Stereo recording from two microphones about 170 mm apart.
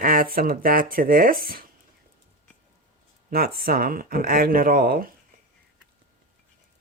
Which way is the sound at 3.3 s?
60° right (ahead or behind).